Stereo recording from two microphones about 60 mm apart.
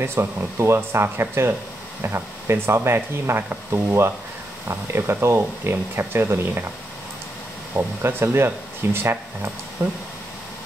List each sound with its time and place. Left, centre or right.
0.0 s speech: right
7.7 s speech: right